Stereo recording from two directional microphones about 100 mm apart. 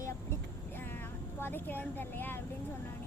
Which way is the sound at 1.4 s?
20° left (ahead or behind).